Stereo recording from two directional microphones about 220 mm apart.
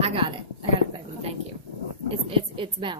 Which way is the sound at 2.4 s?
25° right (ahead or behind).